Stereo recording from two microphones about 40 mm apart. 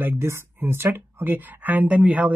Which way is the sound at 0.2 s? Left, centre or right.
Right.